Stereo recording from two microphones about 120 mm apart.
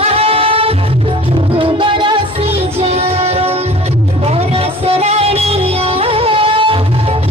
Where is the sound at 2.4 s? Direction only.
60° right (ahead or behind).